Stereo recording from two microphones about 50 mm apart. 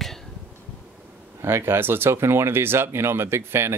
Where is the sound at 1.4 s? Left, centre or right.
Right.